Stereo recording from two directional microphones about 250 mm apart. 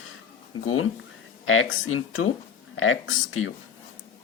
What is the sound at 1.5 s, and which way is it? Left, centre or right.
Speech, left.